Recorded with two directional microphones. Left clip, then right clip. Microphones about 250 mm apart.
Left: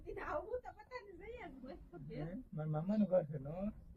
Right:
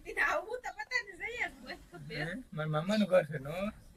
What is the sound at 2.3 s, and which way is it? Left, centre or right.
A man's voice, centre.